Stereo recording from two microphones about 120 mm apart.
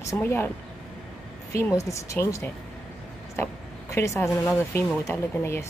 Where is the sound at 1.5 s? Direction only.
25° left (ahead or behind).